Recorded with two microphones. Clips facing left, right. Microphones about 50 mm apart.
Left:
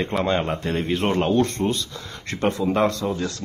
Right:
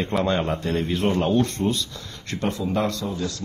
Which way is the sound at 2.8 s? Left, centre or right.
Left.